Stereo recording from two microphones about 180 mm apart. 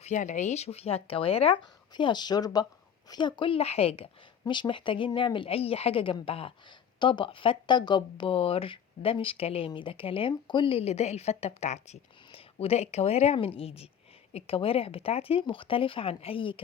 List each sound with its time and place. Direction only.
0.0 s a woman's voice: 45° left (ahead or behind)